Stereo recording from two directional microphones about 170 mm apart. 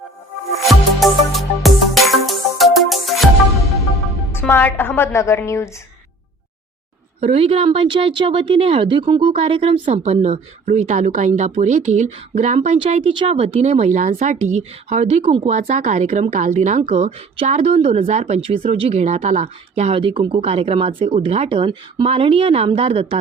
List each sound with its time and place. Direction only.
0.7 s music: centre (ahead or behind)
4.3 s a woman's voice: 15° left (ahead or behind)
7.2 s speech: 35° right (ahead or behind)